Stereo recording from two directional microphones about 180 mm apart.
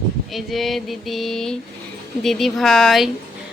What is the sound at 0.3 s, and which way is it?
Speech, centre (ahead or behind).